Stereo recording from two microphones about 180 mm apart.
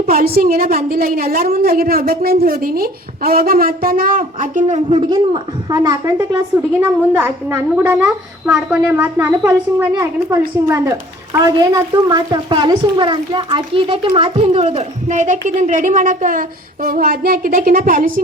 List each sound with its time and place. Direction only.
0.1 s speech: 55° right (ahead or behind)
4.9 s a woman's voice: 30° right (ahead or behind); by 18.1 s 50° right (ahead or behind)